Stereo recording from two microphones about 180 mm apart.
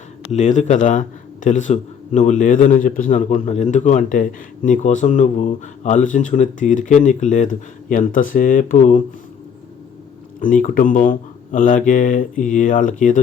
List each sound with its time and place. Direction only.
0.3 s a man's voice: 40° left (ahead or behind)
10.4 s a man's voice: 50° left (ahead or behind)